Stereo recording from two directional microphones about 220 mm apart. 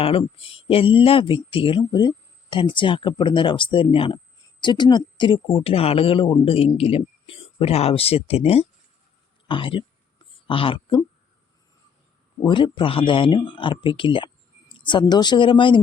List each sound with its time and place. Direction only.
0.0 s speech: 25° left (ahead or behind)
12.4 s speech: 20° left (ahead or behind)